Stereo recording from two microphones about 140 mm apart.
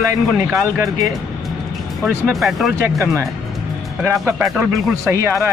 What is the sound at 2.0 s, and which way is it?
Speech, centre (ahead or behind).